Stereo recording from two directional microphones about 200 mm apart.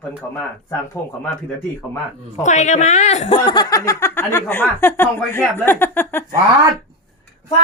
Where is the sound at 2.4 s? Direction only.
35° left (ahead or behind).